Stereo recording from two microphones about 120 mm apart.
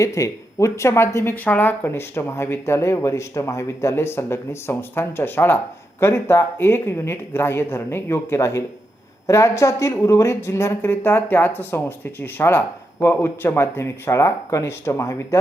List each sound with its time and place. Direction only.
0.0 s speech: 25° left (ahead or behind)